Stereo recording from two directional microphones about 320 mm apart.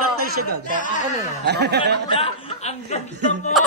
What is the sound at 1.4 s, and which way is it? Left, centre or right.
Speech, right.